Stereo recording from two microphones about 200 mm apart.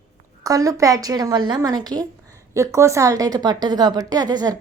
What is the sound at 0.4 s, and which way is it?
A woman's voice, 15° right (ahead or behind).